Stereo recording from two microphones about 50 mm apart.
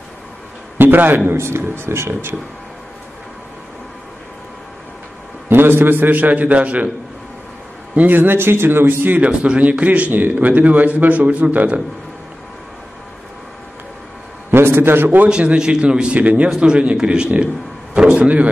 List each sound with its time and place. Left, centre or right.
0.7 s a man's voice: right
1.3 s speech: right
5.5 s a man's voice: right
7.9 s a man's voice: right
9.2 s a man's voice: right
14.5 s a man's voice: right
15.2 s a man's voice: centre
16.2 s speech: right
16.4 s a man's voice: centre